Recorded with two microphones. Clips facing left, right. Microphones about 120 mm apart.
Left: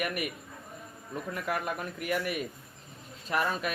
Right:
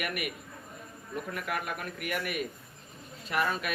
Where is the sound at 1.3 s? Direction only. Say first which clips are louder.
Left 4 dB; 30° left (ahead or behind).